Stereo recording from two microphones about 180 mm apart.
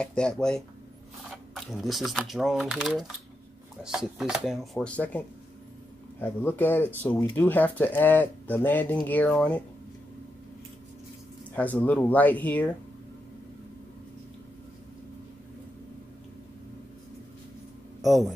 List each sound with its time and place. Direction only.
0.0 s speech: 5° left (ahead or behind)
11.5 s speech: 10° left (ahead or behind)
18.0 s speech: centre (ahead or behind)